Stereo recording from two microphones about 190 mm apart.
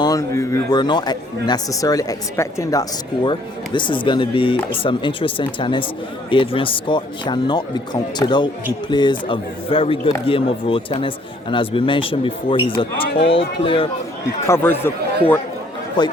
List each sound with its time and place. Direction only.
0.0 s speech: 15° left (ahead or behind)
14.4 s speech: 10° left (ahead or behind)
16.0 s speech: 25° left (ahead or behind)